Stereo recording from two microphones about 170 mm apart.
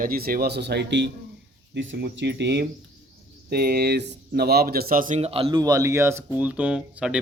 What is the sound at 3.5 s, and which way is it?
Speech, 65° right (ahead or behind).